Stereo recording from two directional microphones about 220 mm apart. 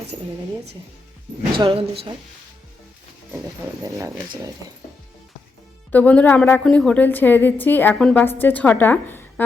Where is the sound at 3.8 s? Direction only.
15° right (ahead or behind).